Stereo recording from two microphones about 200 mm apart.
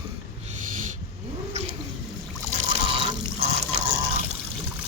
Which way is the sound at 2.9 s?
30° right (ahead or behind).